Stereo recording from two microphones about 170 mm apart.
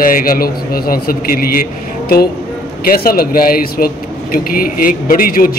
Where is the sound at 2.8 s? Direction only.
60° left (ahead or behind).